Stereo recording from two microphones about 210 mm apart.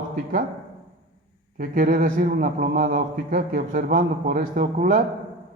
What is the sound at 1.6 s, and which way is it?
A man's voice, 45° right (ahead or behind).